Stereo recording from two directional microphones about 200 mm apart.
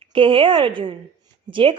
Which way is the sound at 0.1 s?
25° right (ahead or behind).